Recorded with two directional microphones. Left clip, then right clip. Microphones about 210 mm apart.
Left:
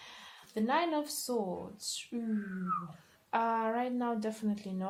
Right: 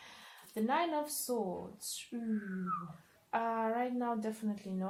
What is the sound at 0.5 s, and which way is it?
Speech, 35° left (ahead or behind).